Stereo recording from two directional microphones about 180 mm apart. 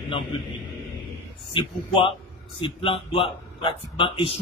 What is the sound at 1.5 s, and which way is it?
A man's voice, 30° left (ahead or behind).